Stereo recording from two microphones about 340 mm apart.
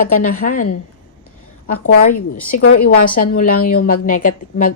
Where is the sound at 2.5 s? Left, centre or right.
Left.